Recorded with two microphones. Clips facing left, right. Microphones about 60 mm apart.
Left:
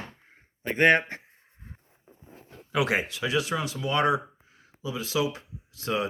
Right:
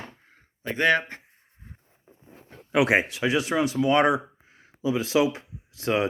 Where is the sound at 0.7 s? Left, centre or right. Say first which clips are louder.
Left 1 dB; left.